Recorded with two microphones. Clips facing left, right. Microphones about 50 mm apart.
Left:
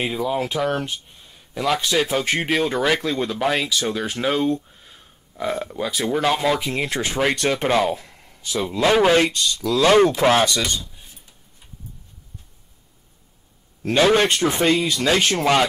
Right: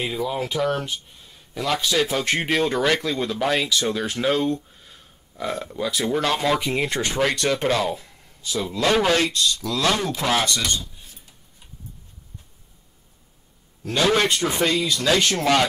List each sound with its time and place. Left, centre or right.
0.0 s speech: centre
7.0 s speech: centre
10.1 s speech: left
13.9 s speech: left